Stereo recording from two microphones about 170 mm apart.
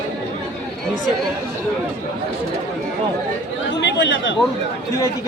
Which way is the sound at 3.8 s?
90° left.